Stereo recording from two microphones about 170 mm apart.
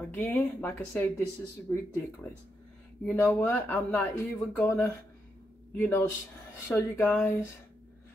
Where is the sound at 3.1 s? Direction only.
15° left (ahead or behind).